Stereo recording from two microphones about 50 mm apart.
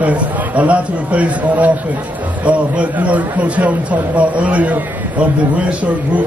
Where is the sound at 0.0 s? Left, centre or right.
Right.